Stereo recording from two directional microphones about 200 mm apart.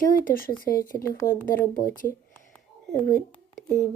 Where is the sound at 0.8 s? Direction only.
15° left (ahead or behind).